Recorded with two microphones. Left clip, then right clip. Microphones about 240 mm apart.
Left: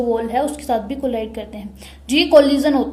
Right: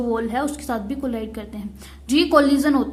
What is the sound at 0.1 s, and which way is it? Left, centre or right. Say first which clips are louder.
A woman's voice: left 4 dB; right.